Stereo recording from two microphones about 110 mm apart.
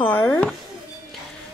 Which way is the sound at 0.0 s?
15° left (ahead or behind).